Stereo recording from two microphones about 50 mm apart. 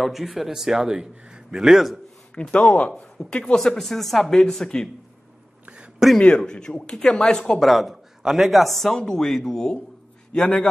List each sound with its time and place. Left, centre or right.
0.0 s a man's voice: centre
2.5 s speech: left
3.5 s speech: centre
6.1 s speech: centre
7.7 s speech: centre